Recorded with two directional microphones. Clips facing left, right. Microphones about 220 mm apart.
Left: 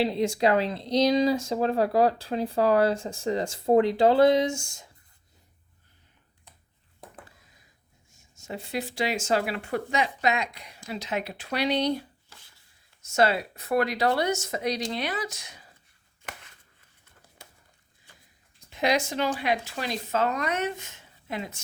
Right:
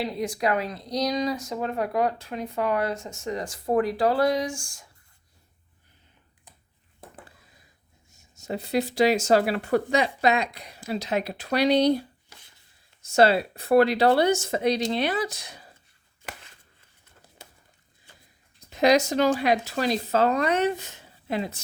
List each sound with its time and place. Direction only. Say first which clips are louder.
0.0 s speech: left 3 dB; 25° left (ahead or behind)
8.1 s speech: right 5 dB; 40° right (ahead or behind)
13.0 s speech: right 4 dB; 30° right (ahead or behind)
18.7 s speech: right 6 dB; 40° right (ahead or behind)